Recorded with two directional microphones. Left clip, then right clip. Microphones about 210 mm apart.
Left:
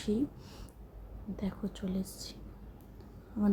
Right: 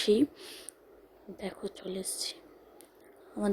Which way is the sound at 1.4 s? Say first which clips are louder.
Right 3 dB; 35° right (ahead or behind).